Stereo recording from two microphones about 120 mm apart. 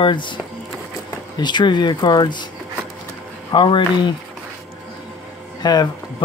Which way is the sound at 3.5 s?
40° left (ahead or behind).